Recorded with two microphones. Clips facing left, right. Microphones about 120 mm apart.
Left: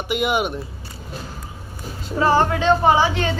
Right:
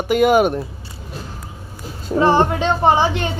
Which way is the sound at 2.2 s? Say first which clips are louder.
Right 1 dB; 20° right (ahead or behind).